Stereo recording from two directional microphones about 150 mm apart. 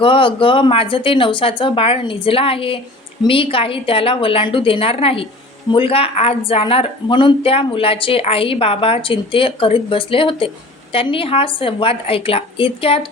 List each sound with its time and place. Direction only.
0.0 s speech: 35° left (ahead or behind)